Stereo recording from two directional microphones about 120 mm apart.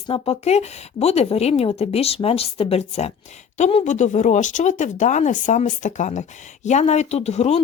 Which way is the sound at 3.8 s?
80° left.